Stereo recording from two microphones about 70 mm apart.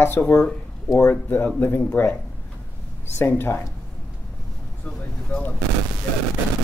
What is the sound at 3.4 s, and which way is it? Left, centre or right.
Speech, left.